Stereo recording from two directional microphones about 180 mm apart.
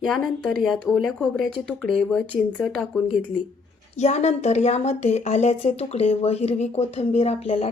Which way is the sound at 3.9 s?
40° left (ahead or behind).